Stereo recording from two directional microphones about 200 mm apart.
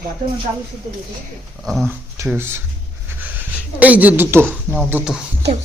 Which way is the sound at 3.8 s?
10° right (ahead or behind).